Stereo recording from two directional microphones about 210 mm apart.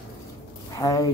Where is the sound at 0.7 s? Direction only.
15° left (ahead or behind).